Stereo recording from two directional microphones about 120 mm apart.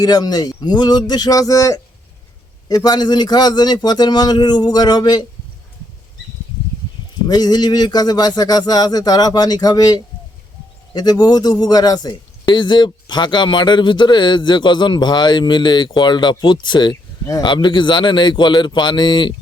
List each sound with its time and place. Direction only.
0.0 s a man's voice: 35° left (ahead or behind)
7.3 s a man's voice: 35° left (ahead or behind)